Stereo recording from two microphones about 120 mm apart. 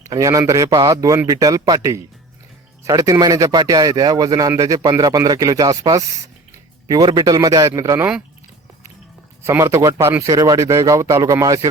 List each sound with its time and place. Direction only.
0.0 s speech: 30° right (ahead or behind)
9.4 s speech: 20° right (ahead or behind)